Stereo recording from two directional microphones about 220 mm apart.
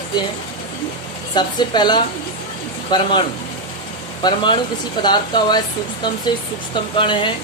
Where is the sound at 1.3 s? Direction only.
20° left (ahead or behind).